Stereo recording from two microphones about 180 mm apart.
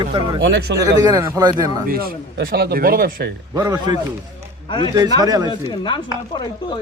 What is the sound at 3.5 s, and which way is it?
Speech, 20° right (ahead or behind).